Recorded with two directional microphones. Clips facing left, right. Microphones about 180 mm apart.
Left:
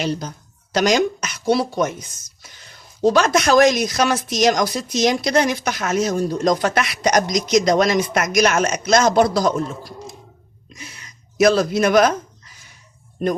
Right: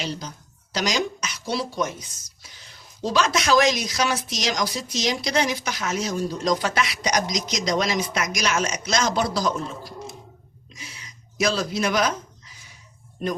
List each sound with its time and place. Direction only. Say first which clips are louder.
0.0 s speech: left 7 dB; 55° left (ahead or behind)
10.8 s speech: left 3 dB; 55° left (ahead or behind)